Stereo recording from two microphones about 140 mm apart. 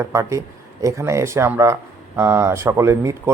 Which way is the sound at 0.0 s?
20° right (ahead or behind).